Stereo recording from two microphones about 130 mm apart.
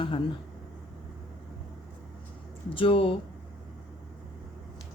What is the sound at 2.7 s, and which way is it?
Speech, 45° left (ahead or behind).